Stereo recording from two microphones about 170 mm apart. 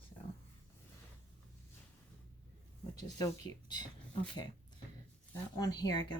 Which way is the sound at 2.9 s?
20° left (ahead or behind).